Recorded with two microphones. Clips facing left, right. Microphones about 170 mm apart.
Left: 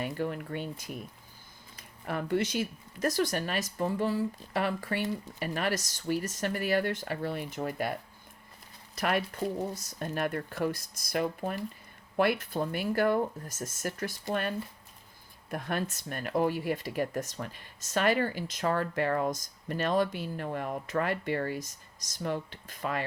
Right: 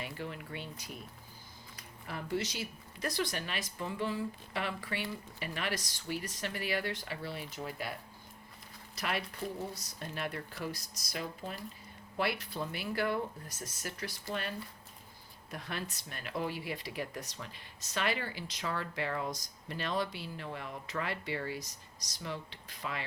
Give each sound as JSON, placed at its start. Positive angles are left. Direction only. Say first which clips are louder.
{"t": 0.0, "sound": "speech", "louder": "left 8 dB", "side_deg": 50}
{"t": 2.0, "sound": "speech", "louder": "left 7 dB", "side_deg": 55}
{"t": 9.0, "sound": "speech", "louder": "left 7 dB", "side_deg": 50}
{"t": 15.4, "sound": "speech", "louder": "left 8 dB", "side_deg": 50}